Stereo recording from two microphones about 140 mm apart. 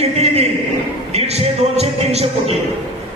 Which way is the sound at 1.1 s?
50° right (ahead or behind).